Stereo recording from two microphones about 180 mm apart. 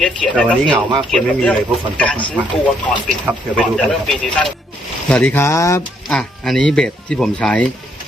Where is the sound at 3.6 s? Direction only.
Centre (ahead or behind).